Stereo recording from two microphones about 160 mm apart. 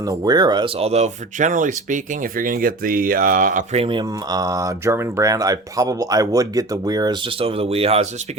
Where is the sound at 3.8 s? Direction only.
30° right (ahead or behind).